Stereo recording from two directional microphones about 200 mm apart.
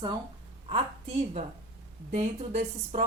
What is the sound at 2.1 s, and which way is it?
Speech, 35° right (ahead or behind).